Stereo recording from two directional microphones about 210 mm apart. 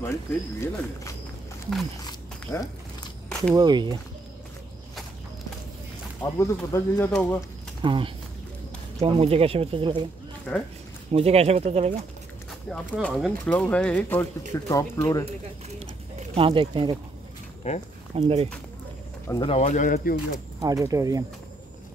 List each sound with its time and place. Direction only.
0.0 s speech: 10° left (ahead or behind)
3.5 s speech: 20° right (ahead or behind)
6.2 s speech: 15° left (ahead or behind)
7.8 s speech: 25° right (ahead or behind)
11.1 s speech: 30° right (ahead or behind)
12.4 s speech: centre (ahead or behind)
15.8 s speech: 30° right (ahead or behind)
17.6 s speech: 30° left (ahead or behind)
18.1 s speech: 30° right (ahead or behind)
19.2 s speech: 20° left (ahead or behind)
19.6 s speech: 35° left (ahead or behind)
20.6 s speech: 15° right (ahead or behind)